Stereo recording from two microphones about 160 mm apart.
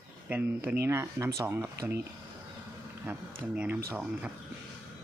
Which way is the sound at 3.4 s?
10° right (ahead or behind).